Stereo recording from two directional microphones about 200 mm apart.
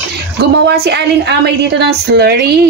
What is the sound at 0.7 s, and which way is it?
A woman's voice, 60° right (ahead or behind).